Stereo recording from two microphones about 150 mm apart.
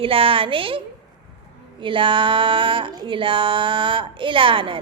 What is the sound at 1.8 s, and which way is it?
A woman's voice, 35° right (ahead or behind).